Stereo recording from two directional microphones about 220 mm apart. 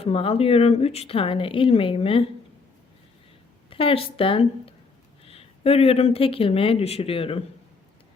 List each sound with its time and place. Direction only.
0.0 s speech: 25° left (ahead or behind)
3.7 s speech: 25° left (ahead or behind)